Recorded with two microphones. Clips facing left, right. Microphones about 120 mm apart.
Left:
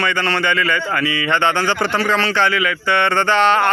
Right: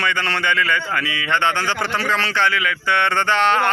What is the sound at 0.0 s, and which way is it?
A man's voice, 5° right (ahead or behind).